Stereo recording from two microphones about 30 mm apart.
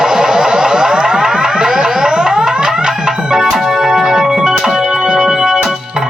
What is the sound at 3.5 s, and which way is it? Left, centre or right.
Music, centre.